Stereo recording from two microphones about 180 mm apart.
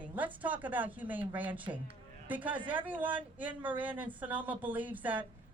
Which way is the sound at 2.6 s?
25° right (ahead or behind).